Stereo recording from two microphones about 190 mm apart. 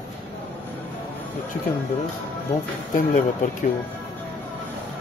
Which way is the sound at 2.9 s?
45° left (ahead or behind).